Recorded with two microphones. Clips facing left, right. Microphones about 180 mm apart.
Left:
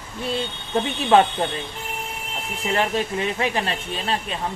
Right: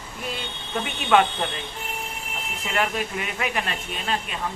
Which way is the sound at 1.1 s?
30° left (ahead or behind).